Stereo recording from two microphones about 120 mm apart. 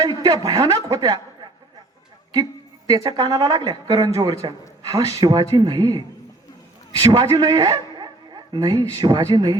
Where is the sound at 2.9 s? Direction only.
35° right (ahead or behind).